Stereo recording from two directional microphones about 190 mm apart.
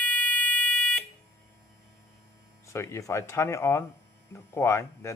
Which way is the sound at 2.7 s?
15° left (ahead or behind).